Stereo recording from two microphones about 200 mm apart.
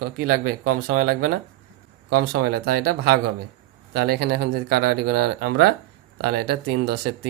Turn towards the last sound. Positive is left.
turn(degrees=-55)  # may be behind; listen again after turning